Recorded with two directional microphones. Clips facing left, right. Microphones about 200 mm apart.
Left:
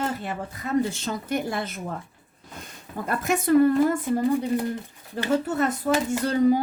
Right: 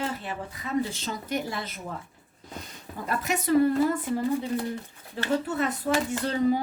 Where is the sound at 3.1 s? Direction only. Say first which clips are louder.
Left 4 dB; 50° left (ahead or behind).